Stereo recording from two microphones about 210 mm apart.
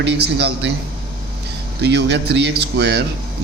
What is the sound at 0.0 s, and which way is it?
Speech, 50° right (ahead or behind).